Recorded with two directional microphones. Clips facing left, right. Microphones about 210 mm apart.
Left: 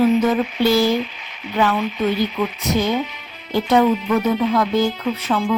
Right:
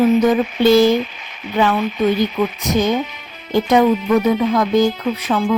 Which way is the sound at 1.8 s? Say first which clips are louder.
Right 2 dB; 45° right (ahead or behind).